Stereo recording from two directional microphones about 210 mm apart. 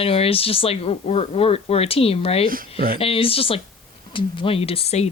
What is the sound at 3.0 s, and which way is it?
A woman's voice, 25° left (ahead or behind).